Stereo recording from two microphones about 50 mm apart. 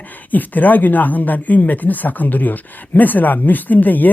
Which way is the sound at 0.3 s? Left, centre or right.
Left.